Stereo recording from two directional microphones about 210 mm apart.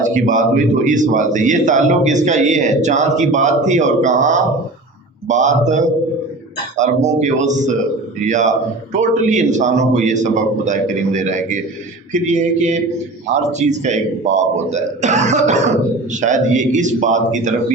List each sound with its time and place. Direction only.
0.0 s a man's voice: 35° right (ahead or behind)